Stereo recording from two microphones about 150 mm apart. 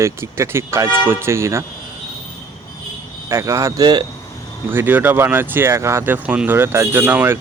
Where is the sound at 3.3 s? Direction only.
20° right (ahead or behind).